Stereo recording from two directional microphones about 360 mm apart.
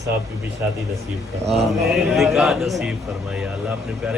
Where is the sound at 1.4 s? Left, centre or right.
Centre.